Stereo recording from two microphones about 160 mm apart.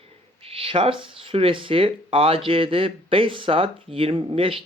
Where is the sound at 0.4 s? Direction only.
35° right (ahead or behind).